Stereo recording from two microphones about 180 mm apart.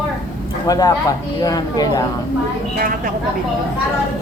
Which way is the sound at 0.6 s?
20° left (ahead or behind).